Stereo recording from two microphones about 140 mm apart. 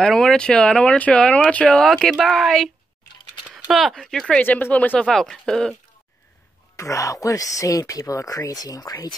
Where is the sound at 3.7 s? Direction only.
Centre (ahead or behind).